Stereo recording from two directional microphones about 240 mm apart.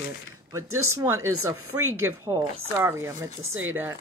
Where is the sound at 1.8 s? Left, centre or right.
Right.